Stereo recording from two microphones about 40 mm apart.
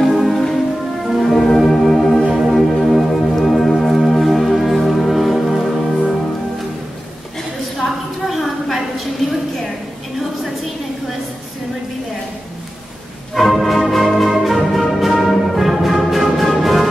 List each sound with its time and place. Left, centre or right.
0.0 s music: centre
7.8 s a sound: centre
13.3 s music: centre